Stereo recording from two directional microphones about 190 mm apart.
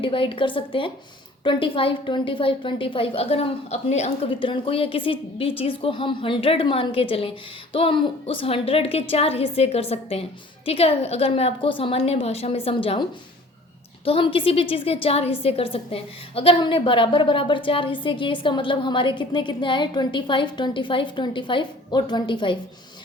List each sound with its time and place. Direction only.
0.0 s a woman's voice: 25° left (ahead or behind)